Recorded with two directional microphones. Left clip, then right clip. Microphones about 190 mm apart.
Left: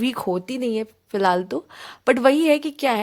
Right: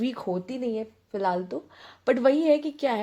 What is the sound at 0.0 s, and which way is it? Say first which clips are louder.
A woman's voice: left 6 dB; 35° left (ahead or behind).